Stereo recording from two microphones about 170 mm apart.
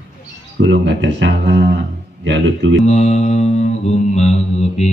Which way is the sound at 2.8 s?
40° left (ahead or behind).